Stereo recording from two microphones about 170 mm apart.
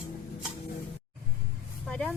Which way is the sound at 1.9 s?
5° left (ahead or behind).